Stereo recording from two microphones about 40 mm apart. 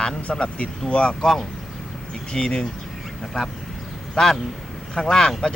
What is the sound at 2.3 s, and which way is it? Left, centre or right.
Speech, left.